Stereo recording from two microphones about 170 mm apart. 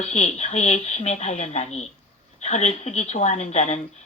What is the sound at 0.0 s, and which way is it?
A woman's voice, 40° left (ahead or behind).